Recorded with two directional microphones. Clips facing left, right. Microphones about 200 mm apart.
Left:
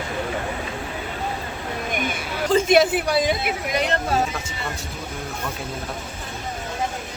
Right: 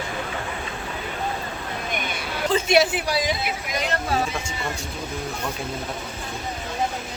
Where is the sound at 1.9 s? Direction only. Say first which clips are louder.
Left 3 dB; 45° left (ahead or behind).